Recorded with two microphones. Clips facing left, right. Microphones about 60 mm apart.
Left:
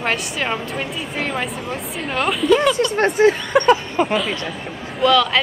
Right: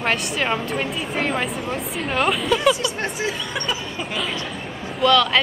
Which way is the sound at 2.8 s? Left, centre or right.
Left.